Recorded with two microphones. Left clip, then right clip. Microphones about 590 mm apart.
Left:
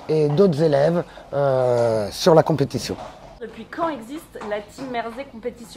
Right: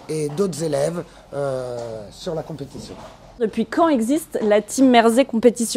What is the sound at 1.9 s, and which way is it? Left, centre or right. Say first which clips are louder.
Speech: left 13 dB; left.